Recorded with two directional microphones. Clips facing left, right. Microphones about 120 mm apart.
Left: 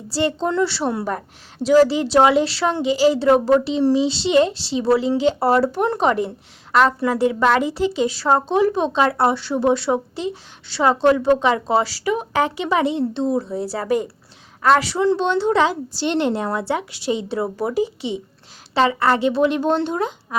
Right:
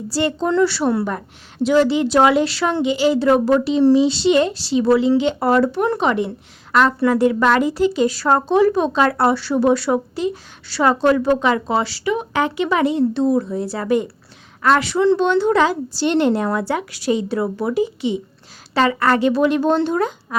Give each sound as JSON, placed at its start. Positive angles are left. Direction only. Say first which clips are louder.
{"t": 0.1, "sound": "speech", "louder": "right 1 dB", "side_deg": 30}
{"t": 7.1, "sound": "speech", "louder": "right 2 dB", "side_deg": 25}